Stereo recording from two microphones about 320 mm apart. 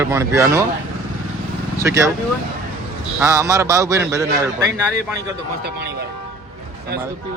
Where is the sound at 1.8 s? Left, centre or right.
Centre.